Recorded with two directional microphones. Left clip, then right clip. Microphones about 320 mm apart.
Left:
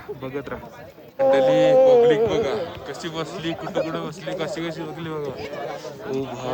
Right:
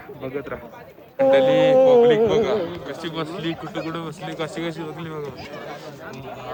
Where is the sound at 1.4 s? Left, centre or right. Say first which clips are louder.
Even; centre.